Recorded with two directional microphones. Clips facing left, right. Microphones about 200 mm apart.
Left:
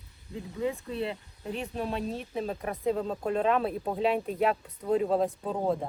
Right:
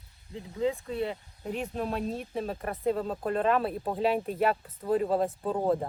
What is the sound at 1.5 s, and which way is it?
Speech, centre (ahead or behind).